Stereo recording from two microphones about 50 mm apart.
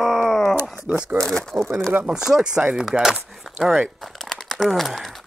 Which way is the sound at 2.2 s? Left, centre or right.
Centre.